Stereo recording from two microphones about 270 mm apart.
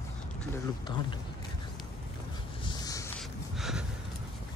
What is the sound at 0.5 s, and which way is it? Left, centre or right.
Speech, centre.